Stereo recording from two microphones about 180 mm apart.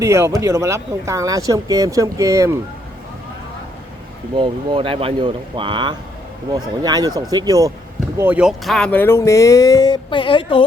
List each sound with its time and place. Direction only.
0.0 s speech: 15° right (ahead or behind)
4.4 s speech: 30° right (ahead or behind)
8.2 s speech: 5° right (ahead or behind); by 10.6 s 30° left (ahead or behind)